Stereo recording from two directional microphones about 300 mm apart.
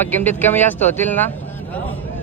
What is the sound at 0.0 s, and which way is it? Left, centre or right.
Speech, centre.